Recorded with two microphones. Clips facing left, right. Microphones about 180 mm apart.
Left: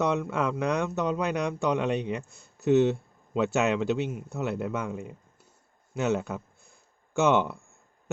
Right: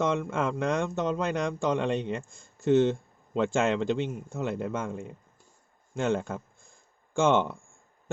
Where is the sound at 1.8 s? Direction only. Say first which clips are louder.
Left 1 dB; 5° left (ahead or behind).